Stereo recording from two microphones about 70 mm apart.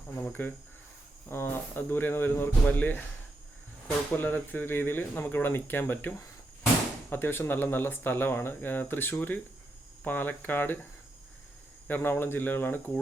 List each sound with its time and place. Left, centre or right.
0.2 s speech: left
11.9 s speech: left